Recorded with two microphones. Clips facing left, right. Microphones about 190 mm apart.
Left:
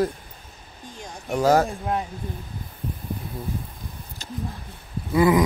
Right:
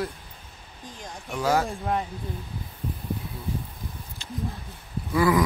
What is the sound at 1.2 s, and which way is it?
Speech, 40° left (ahead or behind).